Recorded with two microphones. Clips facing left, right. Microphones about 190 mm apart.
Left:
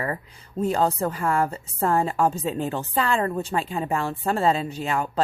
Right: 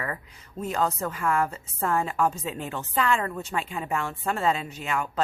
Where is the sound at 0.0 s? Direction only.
30° left (ahead or behind).